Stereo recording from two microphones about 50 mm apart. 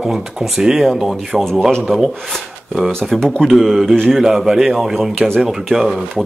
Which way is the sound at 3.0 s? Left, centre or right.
Centre.